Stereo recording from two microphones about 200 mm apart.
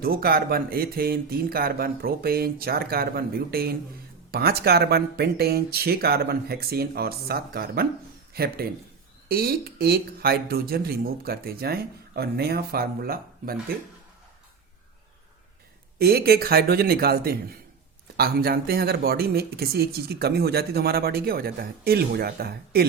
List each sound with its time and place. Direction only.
0.0 s speech: 50° right (ahead or behind)
16.0 s speech: 50° right (ahead or behind)